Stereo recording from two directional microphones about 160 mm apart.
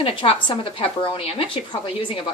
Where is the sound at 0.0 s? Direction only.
35° left (ahead or behind).